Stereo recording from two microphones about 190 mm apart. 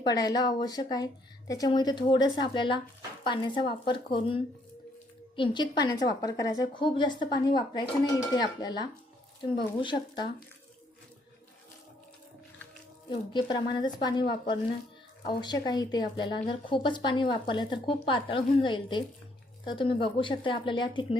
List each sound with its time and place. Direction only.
0.0 s a woman's voice: 20° left (ahead or behind)
13.1 s a woman's voice: 25° left (ahead or behind)